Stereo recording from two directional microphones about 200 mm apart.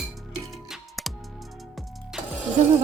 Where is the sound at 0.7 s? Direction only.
Centre (ahead or behind).